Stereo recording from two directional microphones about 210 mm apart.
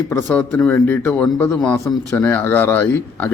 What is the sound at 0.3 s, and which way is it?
A man's voice, 5° left (ahead or behind).